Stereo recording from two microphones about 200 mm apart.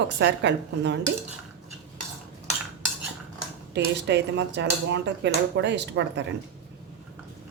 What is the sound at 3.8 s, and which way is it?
Speech, 60° right (ahead or behind).